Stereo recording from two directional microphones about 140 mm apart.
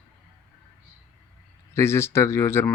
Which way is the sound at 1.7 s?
20° left (ahead or behind).